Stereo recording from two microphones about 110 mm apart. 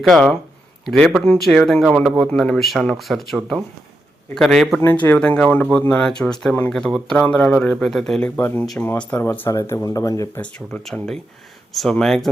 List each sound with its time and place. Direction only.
0.0 s speech: centre (ahead or behind)
4.4 s speech: centre (ahead or behind)
4.8 s speech: 20° left (ahead or behind)
8.4 s speech: 15° left (ahead or behind)
9.5 s speech: 25° left (ahead or behind)
10.3 s speech: 10° left (ahead or behind)